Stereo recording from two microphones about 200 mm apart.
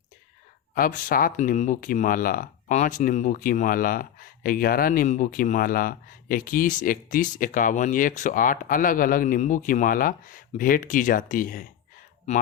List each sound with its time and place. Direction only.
0.7 s speech: 45° left (ahead or behind)